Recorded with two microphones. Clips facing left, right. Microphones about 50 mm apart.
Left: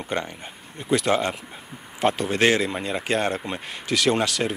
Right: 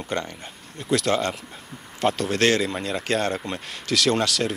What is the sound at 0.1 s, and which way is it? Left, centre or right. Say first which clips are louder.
Speech: even; centre.